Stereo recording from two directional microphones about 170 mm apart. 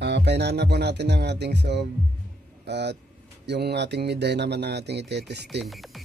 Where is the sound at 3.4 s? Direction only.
80° right.